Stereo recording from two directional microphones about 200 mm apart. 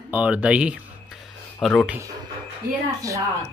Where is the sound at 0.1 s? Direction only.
5° right (ahead or behind).